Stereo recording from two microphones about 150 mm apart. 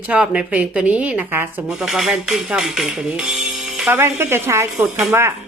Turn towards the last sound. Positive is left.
turn(degrees=-15)  # may be behind; listen again after turning